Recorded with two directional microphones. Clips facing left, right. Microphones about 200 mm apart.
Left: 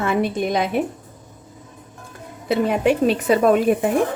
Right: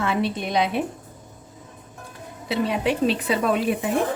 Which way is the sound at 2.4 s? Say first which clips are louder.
Left 5 dB; 50° left (ahead or behind).